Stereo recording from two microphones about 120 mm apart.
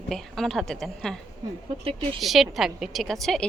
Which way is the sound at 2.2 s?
Centre (ahead or behind).